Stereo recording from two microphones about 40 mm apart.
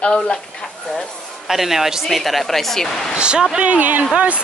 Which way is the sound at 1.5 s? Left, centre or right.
Centre.